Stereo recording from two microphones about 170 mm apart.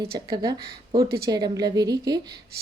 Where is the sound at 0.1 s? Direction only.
20° right (ahead or behind).